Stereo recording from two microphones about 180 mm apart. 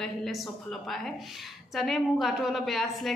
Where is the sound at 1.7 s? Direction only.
Centre (ahead or behind).